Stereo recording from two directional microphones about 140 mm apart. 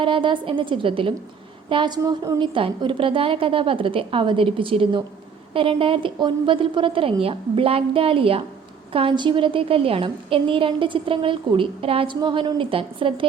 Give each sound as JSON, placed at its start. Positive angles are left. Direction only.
{"t": 0.0, "sound": "a woman's voice", "side_deg": -35}
{"t": 2.6, "sound": "a woman's voice", "side_deg": -40}